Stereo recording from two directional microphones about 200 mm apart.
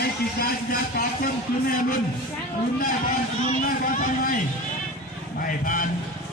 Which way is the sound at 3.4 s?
40° left (ahead or behind).